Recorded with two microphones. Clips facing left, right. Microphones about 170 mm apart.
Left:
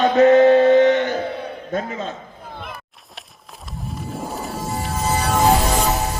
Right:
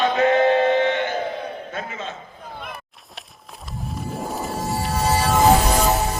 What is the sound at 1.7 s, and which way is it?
Speech, 35° left (ahead or behind).